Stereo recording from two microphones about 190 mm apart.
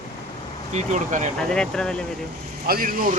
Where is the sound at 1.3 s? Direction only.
5° left (ahead or behind).